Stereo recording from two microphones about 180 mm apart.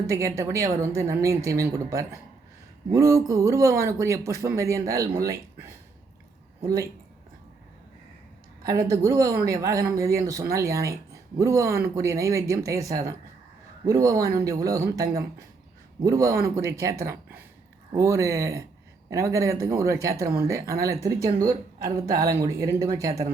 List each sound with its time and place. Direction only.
0.1 s speech: 15° right (ahead or behind)
8.6 s speech: 20° right (ahead or behind)